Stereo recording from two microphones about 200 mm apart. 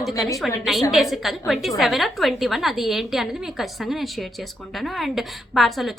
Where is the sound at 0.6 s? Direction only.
Centre (ahead or behind).